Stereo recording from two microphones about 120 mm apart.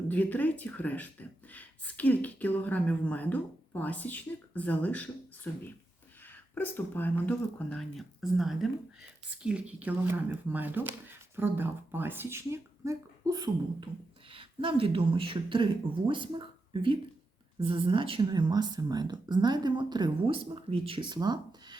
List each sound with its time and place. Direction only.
0.1 s a woman's voice: 15° left (ahead or behind); by 20.1 s 40° right (ahead or behind)
20.2 s speech: 50° right (ahead or behind); by 21.8 s 35° right (ahead or behind)